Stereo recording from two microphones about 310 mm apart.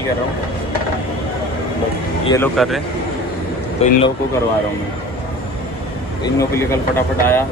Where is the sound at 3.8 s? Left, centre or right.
Centre.